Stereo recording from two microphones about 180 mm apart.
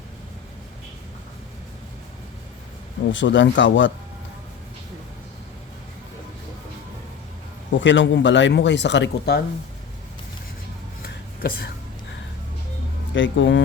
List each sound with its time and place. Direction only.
3.1 s speech: 90° left
7.8 s speech: 90° left; by 9.4 s 70° left (ahead or behind)
11.0 s a sound: 55° left (ahead or behind)
13.1 s speech: 90° left